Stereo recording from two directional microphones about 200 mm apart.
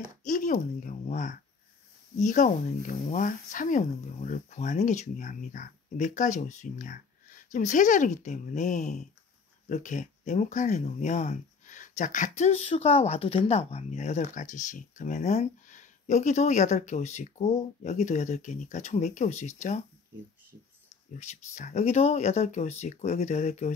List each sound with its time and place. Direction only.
0.2 s speech: 40° left (ahead or behind)
21.2 s speech: 35° left (ahead or behind)